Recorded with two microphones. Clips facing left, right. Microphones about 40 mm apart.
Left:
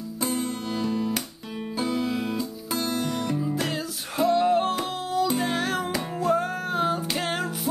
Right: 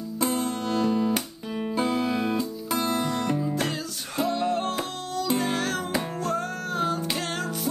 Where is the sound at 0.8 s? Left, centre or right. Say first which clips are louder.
Right 2 dB; centre.